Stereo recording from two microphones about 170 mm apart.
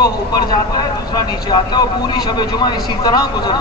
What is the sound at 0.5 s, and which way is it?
A man's voice, 25° left (ahead or behind).